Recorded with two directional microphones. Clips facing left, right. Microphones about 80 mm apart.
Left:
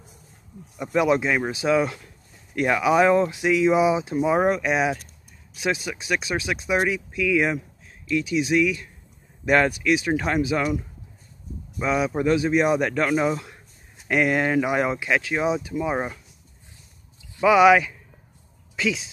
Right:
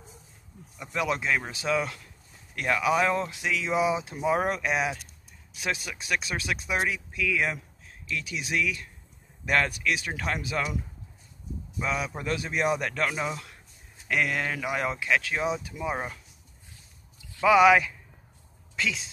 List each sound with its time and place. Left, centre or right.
0.9 s speech: centre
11.8 s speech: centre
14.0 s speech: left
17.4 s speech: centre